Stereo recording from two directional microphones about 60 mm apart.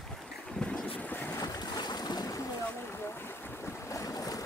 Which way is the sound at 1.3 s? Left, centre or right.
Left.